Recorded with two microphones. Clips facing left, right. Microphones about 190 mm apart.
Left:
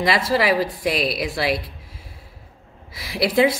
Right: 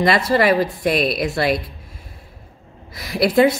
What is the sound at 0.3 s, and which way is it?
Speech, 5° left (ahead or behind).